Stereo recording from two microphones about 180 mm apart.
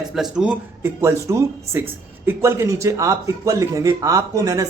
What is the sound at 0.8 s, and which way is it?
A man's voice, 15° right (ahead or behind).